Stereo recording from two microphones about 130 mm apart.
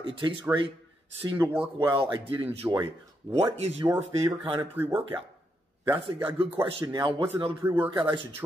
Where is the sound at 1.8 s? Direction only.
40° right (ahead or behind).